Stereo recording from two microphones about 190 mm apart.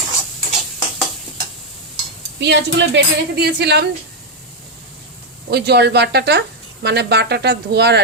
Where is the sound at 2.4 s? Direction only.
65° right (ahead or behind).